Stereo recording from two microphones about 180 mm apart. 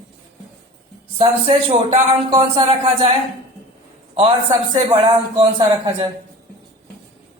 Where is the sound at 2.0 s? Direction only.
30° right (ahead or behind).